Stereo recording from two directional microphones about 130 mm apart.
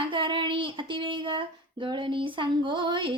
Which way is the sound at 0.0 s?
40° right (ahead or behind).